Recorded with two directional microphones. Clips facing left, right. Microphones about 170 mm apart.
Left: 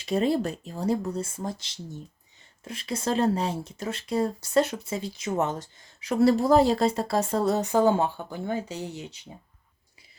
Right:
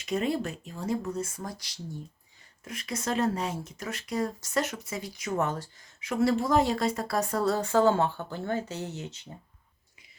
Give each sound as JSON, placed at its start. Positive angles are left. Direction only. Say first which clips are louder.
{"t": 0.0, "sound": "speech", "louder": "left 4 dB", "side_deg": 30}
{"t": 6.0, "sound": "speech", "louder": "left 5 dB", "side_deg": 35}